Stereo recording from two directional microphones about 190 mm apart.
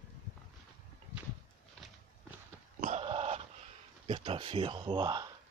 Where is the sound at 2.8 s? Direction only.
35° right (ahead or behind).